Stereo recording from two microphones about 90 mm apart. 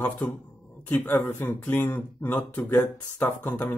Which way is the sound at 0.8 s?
20° left (ahead or behind).